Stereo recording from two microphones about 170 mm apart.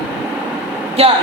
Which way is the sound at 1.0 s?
35° right (ahead or behind).